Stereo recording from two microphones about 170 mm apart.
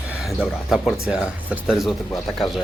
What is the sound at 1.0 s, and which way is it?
Speech, 5° right (ahead or behind).